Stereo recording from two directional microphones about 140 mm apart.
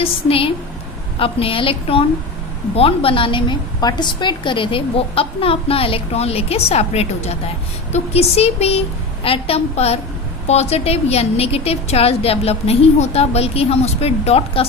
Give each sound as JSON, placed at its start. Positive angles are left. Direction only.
{"t": 0.0, "sound": "a woman's voice", "side_deg": 40}